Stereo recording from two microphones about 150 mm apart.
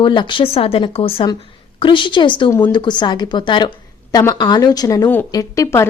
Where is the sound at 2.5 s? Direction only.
15° left (ahead or behind).